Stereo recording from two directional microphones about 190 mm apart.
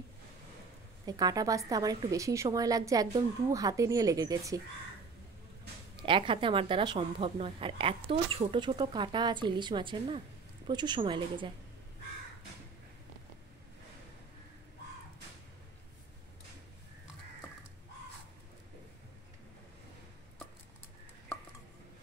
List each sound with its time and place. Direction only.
1.0 s a woman's voice: 20° right (ahead or behind)
6.0 s a woman's voice: 25° right (ahead or behind)